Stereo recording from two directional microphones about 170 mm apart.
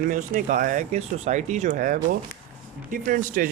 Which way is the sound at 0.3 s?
50° right (ahead or behind).